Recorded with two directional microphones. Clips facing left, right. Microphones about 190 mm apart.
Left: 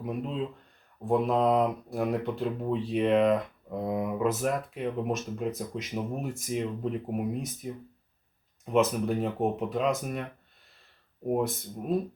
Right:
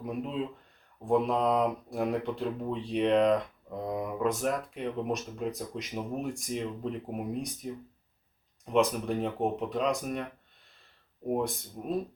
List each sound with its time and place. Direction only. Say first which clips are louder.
0.0 s speech: left 1 dB; centre (ahead or behind)
11.3 s speech: left 2 dB; 5° left (ahead or behind)